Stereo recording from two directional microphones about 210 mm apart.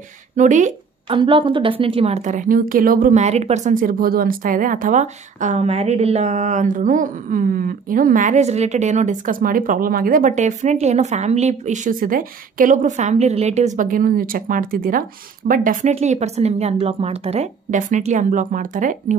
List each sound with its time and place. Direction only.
0.4 s speech: 35° right (ahead or behind)
1.1 s a woman's voice: 25° right (ahead or behind)